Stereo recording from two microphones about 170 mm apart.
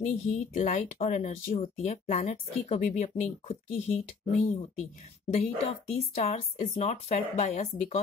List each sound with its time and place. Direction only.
0.0 s speech: 40° left (ahead or behind)